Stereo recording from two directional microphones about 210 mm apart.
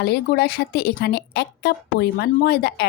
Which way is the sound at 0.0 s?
50° left (ahead or behind).